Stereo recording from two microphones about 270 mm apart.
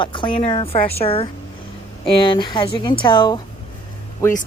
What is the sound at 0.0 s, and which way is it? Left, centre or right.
A woman's voice, centre.